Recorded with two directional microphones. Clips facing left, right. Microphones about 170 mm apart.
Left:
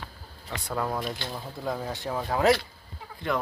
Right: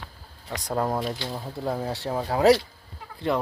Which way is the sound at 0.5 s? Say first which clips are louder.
Right 4 dB; 40° right (ahead or behind).